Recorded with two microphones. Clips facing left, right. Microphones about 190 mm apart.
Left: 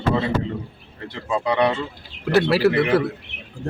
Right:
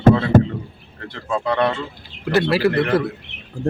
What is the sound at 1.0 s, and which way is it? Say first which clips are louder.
A man's voice: even; 5° left (ahead or behind).